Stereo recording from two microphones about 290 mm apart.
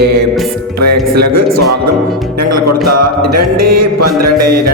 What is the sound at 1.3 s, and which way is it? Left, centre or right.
Mantra, right.